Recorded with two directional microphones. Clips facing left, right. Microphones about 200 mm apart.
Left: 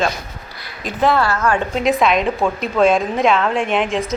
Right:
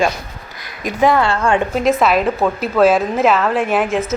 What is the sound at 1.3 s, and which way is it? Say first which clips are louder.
Speech: right 2 dB; 25° right (ahead or behind).